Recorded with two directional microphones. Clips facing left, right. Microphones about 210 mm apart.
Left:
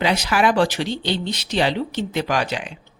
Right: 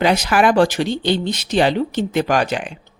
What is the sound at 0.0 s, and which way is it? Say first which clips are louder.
Speech: right 4 dB; 45° right (ahead or behind).